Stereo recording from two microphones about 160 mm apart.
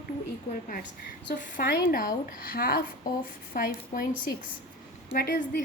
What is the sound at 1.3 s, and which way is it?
A woman's voice, 60° left (ahead or behind).